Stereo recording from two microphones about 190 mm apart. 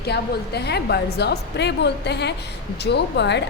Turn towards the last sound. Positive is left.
turn(degrees=65)  # may be behind; listen again after turning